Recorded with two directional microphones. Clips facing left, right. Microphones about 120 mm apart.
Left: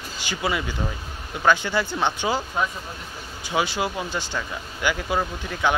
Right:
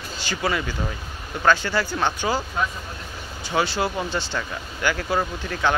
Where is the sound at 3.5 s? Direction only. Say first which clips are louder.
Right 1 dB; 10° left (ahead or behind).